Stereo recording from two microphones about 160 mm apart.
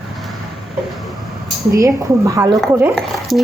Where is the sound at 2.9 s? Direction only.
Centre (ahead or behind).